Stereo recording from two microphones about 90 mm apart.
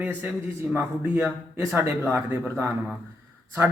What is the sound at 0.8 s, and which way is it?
Speech, 25° right (ahead or behind).